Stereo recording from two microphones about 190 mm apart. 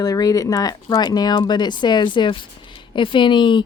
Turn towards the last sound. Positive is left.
turn(degrees=25)  # may be behind; listen again after turning